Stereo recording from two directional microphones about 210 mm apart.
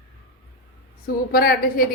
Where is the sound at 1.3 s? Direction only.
45° left (ahead or behind).